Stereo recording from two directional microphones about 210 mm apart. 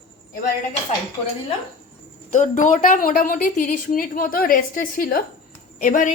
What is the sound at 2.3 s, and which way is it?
A woman's voice, 35° left (ahead or behind).